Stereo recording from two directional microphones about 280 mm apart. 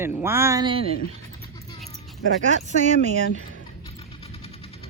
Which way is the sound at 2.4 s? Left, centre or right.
Right.